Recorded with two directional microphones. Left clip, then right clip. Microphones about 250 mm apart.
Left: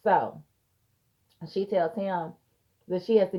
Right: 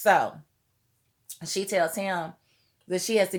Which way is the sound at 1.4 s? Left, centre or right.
Right.